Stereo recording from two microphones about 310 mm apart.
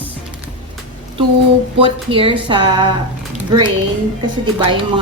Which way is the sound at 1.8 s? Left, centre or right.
Centre.